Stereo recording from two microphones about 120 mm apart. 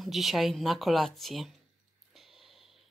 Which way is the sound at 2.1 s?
Centre (ahead or behind).